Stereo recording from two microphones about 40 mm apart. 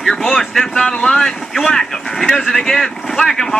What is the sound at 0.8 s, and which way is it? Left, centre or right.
Speech, left.